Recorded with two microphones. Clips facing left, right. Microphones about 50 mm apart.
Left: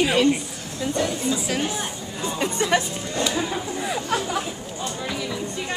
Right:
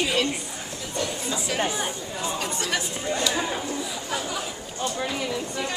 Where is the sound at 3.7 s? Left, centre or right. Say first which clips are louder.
Left 5 dB; left.